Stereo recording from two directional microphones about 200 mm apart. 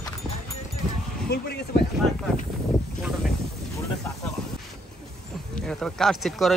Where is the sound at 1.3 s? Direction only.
55° left (ahead or behind).